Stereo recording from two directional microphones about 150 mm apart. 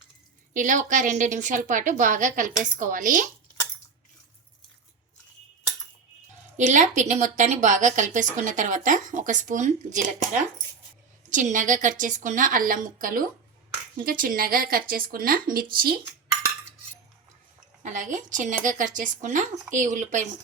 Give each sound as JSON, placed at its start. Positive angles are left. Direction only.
{"t": 0.5, "sound": "a woman's voice", "side_deg": -60}
{"t": 6.6, "sound": "a woman's voice", "side_deg": -55}
{"t": 11.3, "sound": "a woman's voice", "side_deg": -55}
{"t": 17.8, "sound": "a woman's voice", "side_deg": -60}